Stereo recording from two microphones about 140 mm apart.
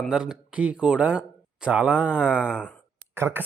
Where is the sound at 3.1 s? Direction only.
15° right (ahead or behind).